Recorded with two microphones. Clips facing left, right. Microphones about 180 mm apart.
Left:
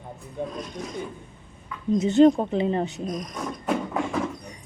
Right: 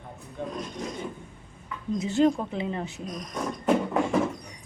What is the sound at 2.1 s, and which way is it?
Speech, 35° left (ahead or behind).